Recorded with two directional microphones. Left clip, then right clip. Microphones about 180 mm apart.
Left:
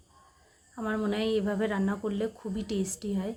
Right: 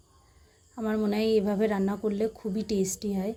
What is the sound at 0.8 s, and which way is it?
A woman's voice, 15° right (ahead or behind).